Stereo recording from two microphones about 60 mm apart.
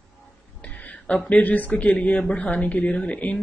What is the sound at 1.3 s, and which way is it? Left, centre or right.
Speech, left.